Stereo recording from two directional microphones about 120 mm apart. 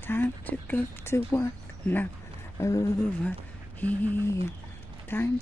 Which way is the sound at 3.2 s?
15° left (ahead or behind).